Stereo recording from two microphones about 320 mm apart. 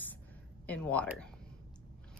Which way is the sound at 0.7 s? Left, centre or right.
Centre.